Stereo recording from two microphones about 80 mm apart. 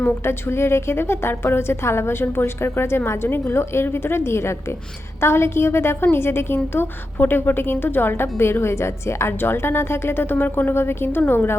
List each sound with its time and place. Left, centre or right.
0.3 s a woman's voice: left